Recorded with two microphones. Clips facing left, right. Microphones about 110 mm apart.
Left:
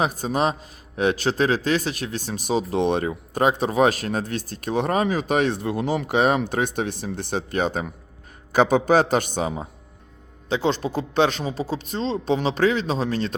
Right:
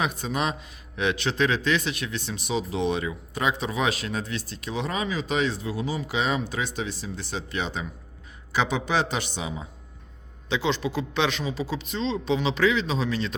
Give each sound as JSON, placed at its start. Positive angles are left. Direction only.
{"t": 0.0, "sound": "a man's voice", "side_deg": 40}